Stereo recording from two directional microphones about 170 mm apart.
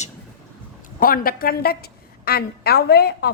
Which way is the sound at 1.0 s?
60° left (ahead or behind).